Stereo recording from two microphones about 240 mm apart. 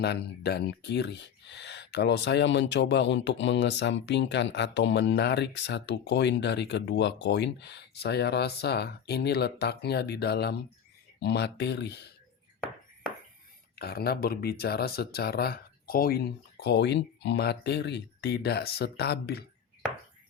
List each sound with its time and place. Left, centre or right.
0.0 s speech: left
13.7 s speech: left